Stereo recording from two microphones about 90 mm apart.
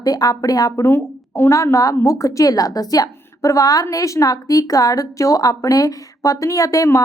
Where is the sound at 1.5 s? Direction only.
40° left (ahead or behind).